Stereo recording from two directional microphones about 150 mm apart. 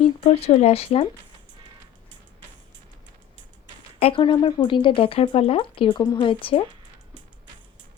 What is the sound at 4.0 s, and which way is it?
Speech, 35° left (ahead or behind).